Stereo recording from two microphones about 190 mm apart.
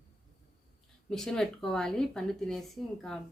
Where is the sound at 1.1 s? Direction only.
Centre (ahead or behind).